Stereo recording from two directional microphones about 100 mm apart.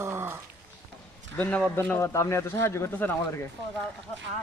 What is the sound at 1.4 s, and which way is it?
Speech, 15° left (ahead or behind).